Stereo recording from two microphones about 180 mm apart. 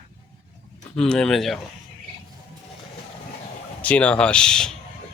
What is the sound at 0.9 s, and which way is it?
Speech, 5° left (ahead or behind).